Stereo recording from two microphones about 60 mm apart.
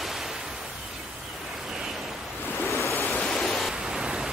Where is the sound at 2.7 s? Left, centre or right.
Left.